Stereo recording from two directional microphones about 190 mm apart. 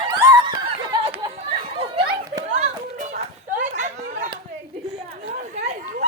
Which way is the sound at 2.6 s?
40° right (ahead or behind).